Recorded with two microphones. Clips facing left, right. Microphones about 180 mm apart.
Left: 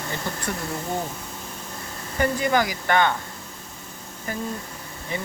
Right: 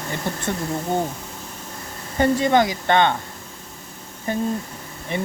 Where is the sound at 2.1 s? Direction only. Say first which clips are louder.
Right 5 dB; 25° right (ahead or behind).